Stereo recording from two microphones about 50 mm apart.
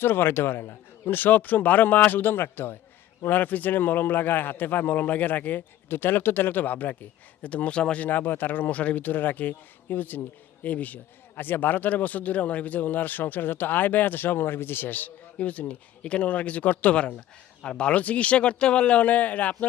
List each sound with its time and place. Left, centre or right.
0.0 s a man's voice: left
3.2 s a man's voice: left
8.0 s a man's voice: left
11.3 s a man's voice: left